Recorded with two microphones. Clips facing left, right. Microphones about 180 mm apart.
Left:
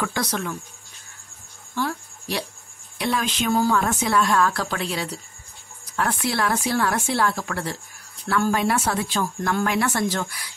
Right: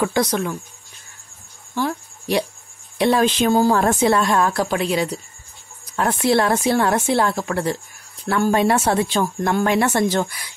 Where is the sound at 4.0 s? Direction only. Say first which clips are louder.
Right 4 dB; 25° right (ahead or behind).